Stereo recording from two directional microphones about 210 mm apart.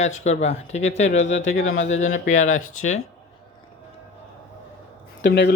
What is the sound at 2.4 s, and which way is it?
Speech, 75° left (ahead or behind).